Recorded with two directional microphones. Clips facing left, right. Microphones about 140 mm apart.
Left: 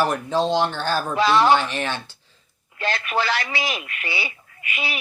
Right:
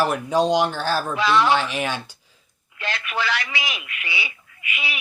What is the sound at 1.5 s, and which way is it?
Speech, 5° right (ahead or behind).